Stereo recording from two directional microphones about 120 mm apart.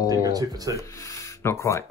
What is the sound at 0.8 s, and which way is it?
Speech, 25° left (ahead or behind).